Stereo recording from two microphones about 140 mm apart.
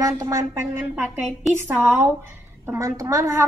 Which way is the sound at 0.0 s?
25° right (ahead or behind).